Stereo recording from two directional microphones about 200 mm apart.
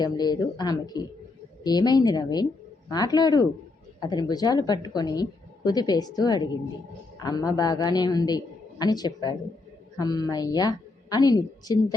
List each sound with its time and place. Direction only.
0.0 s a woman's voice: 20° left (ahead or behind)